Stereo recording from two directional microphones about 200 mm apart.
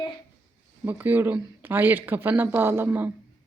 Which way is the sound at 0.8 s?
10° right (ahead or behind).